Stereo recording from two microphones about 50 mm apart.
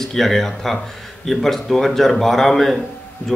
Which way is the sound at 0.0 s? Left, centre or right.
Centre.